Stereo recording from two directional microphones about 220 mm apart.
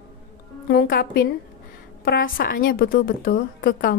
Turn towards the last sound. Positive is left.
turn(degrees=40)  # may be behind; listen again after turning